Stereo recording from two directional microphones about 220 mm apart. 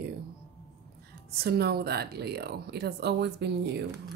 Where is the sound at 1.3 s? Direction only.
45° right (ahead or behind).